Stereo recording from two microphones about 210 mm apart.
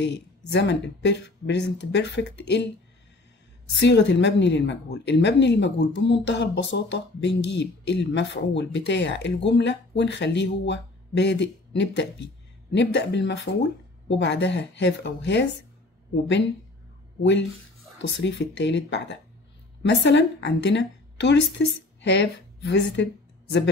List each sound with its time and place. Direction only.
0.0 s a woman's voice: 55° left (ahead or behind)
3.7 s a woman's voice: 55° left (ahead or behind)
17.2 s a woman's voice: 60° left (ahead or behind)